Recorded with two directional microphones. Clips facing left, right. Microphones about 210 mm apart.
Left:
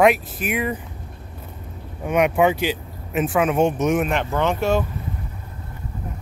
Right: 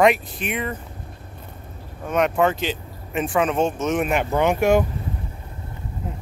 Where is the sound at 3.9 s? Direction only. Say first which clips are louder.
Right 1 dB; 5° right (ahead or behind).